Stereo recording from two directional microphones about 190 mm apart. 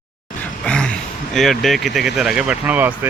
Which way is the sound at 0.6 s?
5° left (ahead or behind).